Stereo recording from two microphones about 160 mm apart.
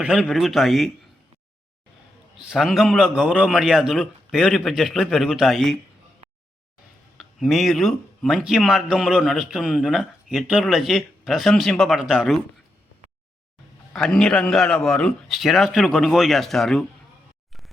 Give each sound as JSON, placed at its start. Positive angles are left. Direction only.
{"t": 0.0, "sound": "speech", "side_deg": -5}
{"t": 2.4, "sound": "speech", "side_deg": 0}
{"t": 7.2, "sound": "speech", "side_deg": 0}
{"t": 13.9, "sound": "speech", "side_deg": 5}